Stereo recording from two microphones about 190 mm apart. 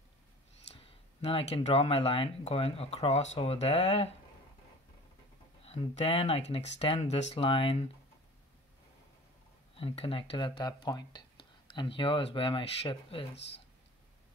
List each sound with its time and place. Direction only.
0.7 s clicking: 30° left (ahead or behind)
1.5 s speech: 30° left (ahead or behind)
5.7 s speech: 30° left (ahead or behind)
9.8 s speech: 30° left (ahead or behind)